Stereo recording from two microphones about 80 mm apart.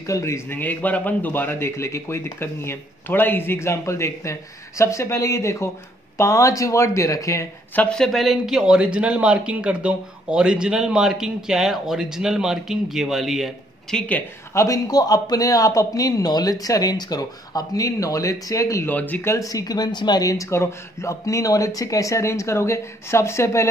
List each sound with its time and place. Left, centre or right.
0.0 s speech: left
0.6 s speech: left
7.9 s speech: centre
13.9 s a woman's voice: centre
14.5 s a man's voice: left
18.9 s speech: left
19.2 s speech: left
20.2 s speech: left